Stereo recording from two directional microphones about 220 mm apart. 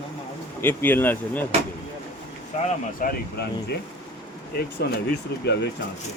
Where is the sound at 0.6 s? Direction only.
10° left (ahead or behind).